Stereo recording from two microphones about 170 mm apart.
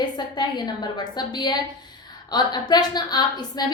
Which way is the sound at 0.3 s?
25° left (ahead or behind).